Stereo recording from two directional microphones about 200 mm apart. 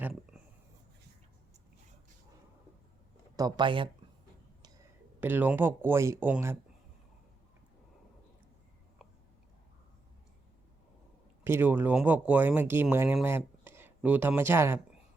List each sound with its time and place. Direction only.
0.0 s a sound: 5° right (ahead or behind)
3.3 s speech: 20° right (ahead or behind)
5.2 s speech: 10° right (ahead or behind)
11.4 s speech: 10° right (ahead or behind)